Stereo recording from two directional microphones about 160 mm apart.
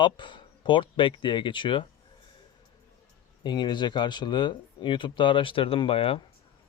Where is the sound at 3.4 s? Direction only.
25° left (ahead or behind).